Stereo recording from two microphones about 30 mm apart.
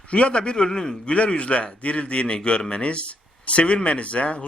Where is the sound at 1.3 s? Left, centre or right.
Left.